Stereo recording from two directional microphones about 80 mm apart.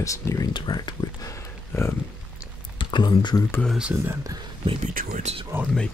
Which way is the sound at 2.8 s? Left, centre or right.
Left.